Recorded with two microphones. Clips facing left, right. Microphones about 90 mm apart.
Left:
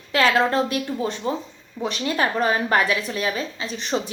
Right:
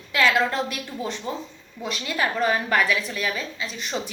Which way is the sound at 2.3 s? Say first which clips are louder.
Even; 25° left (ahead or behind).